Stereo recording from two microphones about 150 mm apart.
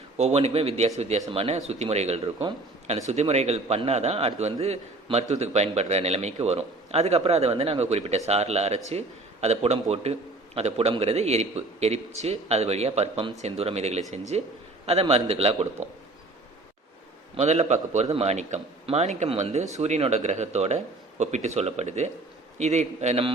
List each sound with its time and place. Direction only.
0.2 s a man's voice: 45° right (ahead or behind)
17.3 s a man's voice: 50° right (ahead or behind)